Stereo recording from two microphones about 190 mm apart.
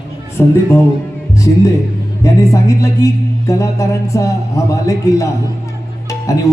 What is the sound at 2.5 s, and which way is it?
Speech, 15° left (ahead or behind).